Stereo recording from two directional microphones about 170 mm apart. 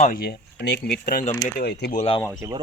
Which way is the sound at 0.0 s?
55° left (ahead or behind).